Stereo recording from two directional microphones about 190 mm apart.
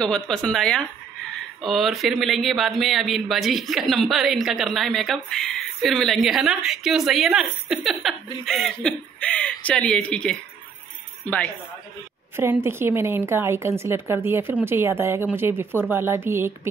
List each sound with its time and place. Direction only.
0.0 s speech: 5° left (ahead or behind)
12.4 s a woman's voice: 10° right (ahead or behind)